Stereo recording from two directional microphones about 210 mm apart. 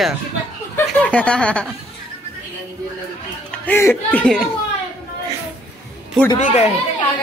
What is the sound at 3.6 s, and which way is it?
Speech, 10° left (ahead or behind).